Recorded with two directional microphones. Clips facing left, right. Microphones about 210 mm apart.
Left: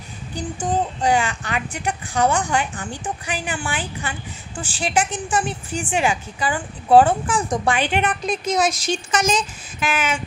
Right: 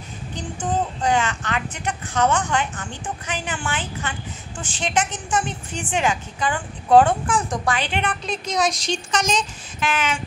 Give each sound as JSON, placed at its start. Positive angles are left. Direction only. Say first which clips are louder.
{"t": 0.3, "sound": "speech", "louder": "left 2 dB", "side_deg": 10}
{"t": 7.4, "sound": "speech", "louder": "left 3 dB", "side_deg": 20}
{"t": 7.7, "sound": "speech", "louder": "left 3 dB", "side_deg": 10}